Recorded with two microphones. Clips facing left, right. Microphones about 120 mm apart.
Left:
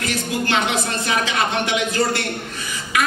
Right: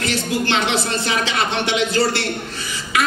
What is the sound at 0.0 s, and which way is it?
A woman's voice, 30° right (ahead or behind).